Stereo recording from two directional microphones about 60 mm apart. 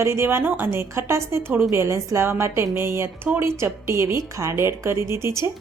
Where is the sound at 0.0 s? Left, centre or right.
Right.